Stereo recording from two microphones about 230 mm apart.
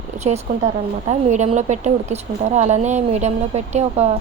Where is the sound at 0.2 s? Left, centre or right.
Right.